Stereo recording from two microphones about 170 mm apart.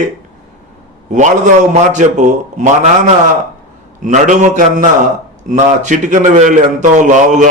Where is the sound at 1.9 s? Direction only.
45° right (ahead or behind).